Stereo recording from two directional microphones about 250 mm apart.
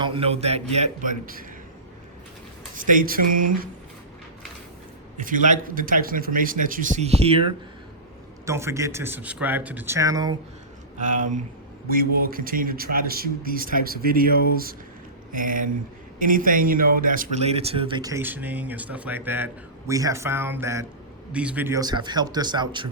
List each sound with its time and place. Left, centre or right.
0.0 s speech: right
2.7 s speech: right
5.1 s a man's voice: right
8.4 s a man's voice: centre
10.9 s a man's voice: right